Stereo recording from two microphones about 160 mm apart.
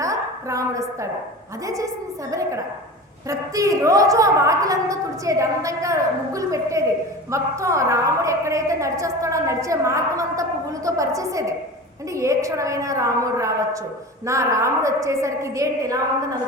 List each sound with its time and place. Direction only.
0.0 s a sound: 20° right (ahead or behind)
1.6 s a woman's voice: 20° right (ahead or behind)
3.2 s a woman's voice: 20° right (ahead or behind)